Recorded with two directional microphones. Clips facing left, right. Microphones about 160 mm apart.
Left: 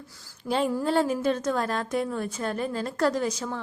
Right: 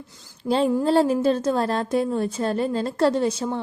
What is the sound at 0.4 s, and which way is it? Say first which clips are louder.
A woman's voice: right 5 dB; 30° right (ahead or behind).